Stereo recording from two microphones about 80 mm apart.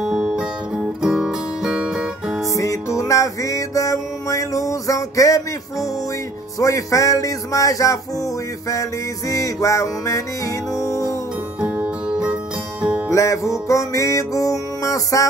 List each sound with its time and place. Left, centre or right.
0.0 s music: centre
2.5 s music: left
6.6 s speech: left
9.3 s speech: left
10.8 s music: left
11.6 s music: centre
13.1 s music: left